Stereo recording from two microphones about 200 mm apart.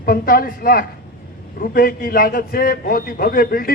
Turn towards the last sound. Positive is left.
turn(degrees=45)  # may be behind; listen again after turning